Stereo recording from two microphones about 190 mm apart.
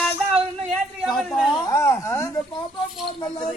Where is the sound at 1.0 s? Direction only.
Centre (ahead or behind).